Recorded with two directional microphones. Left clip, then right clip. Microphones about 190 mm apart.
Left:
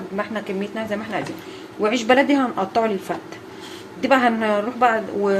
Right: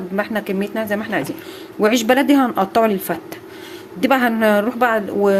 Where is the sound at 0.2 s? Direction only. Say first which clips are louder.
Right 4 dB; 60° right (ahead or behind).